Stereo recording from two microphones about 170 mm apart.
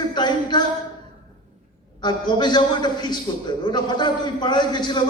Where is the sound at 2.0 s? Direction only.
25° left (ahead or behind).